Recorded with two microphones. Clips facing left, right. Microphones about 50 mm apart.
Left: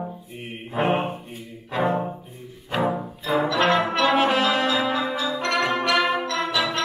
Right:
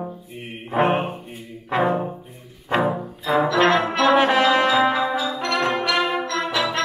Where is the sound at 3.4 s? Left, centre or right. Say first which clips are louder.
Right 3 dB; right.